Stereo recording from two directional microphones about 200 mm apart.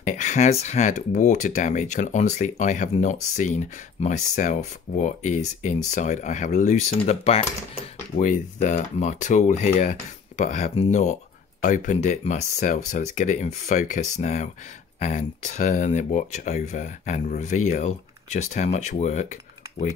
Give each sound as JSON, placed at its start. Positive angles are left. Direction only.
{"t": 0.0, "sound": "speech", "side_deg": 40}
{"t": 8.2, "sound": "speech", "side_deg": 40}